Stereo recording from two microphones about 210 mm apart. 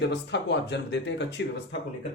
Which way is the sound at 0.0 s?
55° left (ahead or behind).